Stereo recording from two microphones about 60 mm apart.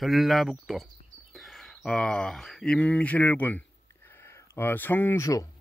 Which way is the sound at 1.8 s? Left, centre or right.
Centre.